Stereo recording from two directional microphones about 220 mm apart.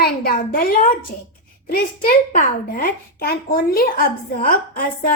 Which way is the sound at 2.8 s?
40° left (ahead or behind).